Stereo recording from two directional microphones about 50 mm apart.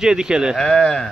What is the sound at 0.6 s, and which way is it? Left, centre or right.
Speech, centre.